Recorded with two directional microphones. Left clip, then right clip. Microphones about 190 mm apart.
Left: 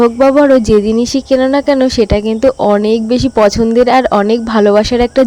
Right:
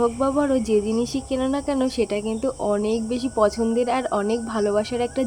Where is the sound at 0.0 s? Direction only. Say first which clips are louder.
Left 13 dB; 40° left (ahead or behind).